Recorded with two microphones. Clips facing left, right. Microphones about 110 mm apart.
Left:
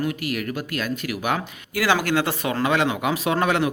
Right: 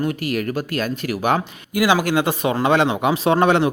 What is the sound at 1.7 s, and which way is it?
Speech, 15° right (ahead or behind).